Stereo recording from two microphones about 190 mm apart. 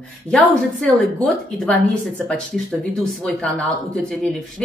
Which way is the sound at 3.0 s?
5° left (ahead or behind).